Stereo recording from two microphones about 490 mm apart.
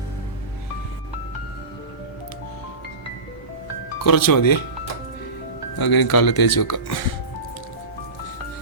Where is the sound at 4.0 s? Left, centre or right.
Left.